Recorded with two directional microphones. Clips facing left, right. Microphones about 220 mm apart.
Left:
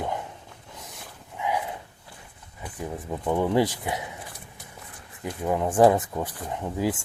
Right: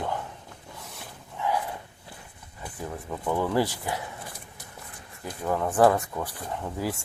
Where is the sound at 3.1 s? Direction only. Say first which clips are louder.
Left 3 dB; 20° left (ahead or behind).